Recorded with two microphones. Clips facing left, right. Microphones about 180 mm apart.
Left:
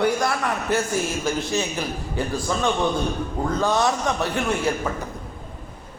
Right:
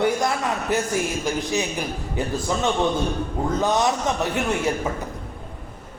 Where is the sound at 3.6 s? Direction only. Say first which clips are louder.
Even; 20° right (ahead or behind).